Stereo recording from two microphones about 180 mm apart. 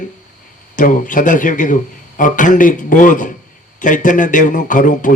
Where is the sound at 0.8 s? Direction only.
45° left (ahead or behind).